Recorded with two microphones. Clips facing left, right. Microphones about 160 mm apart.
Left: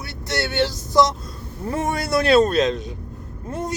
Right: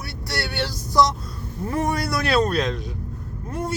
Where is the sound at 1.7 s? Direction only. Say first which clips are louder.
Left 2 dB; 25° left (ahead or behind).